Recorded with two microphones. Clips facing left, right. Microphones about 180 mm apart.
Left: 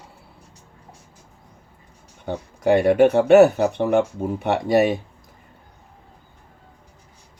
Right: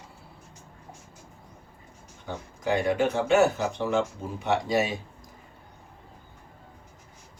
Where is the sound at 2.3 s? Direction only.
60° left (ahead or behind).